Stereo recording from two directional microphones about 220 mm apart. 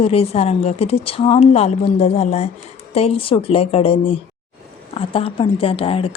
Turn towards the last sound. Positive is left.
turn(degrees=25)  # may be behind; listen again after turning